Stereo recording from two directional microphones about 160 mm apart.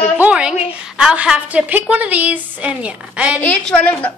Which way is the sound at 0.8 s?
5° right (ahead or behind).